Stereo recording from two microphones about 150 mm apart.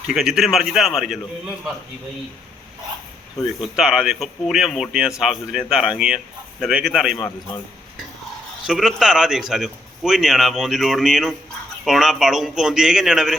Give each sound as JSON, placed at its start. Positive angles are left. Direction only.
{"t": 0.1, "sound": "speech", "side_deg": 0}
{"t": 3.8, "sound": "speech", "side_deg": -5}
{"t": 7.2, "sound": "a man's voice", "side_deg": 20}
{"t": 8.6, "sound": "speech", "side_deg": -5}